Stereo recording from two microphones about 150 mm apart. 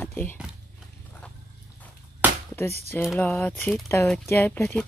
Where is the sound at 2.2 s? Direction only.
10° right (ahead or behind).